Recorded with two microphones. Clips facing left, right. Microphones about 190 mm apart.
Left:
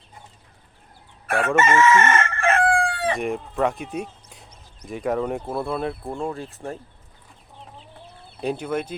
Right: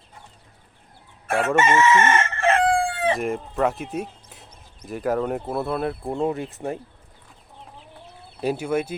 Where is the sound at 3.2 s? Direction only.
Centre (ahead or behind).